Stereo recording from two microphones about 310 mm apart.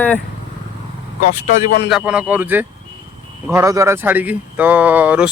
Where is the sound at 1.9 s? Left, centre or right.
Centre.